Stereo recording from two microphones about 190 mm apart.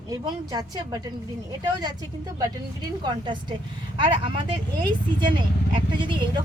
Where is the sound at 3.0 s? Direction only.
25° right (ahead or behind).